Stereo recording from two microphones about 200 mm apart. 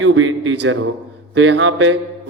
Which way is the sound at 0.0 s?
75° right (ahead or behind).